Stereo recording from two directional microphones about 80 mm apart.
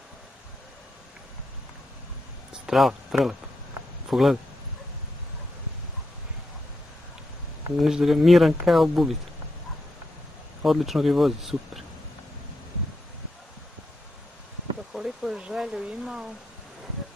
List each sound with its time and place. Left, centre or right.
2.5 s speech: centre
7.7 s speech: centre
10.6 s speech: centre
15.0 s a sound: centre